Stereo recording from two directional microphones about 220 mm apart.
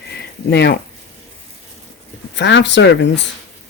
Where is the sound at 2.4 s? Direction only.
55° left (ahead or behind).